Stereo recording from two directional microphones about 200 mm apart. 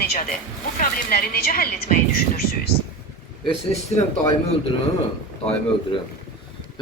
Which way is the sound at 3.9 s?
35° left (ahead or behind).